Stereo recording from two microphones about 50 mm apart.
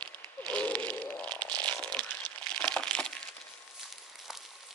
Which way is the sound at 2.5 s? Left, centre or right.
Centre.